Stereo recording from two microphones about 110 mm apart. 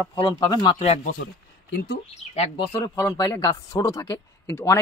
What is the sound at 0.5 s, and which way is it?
Speech, 40° left (ahead or behind).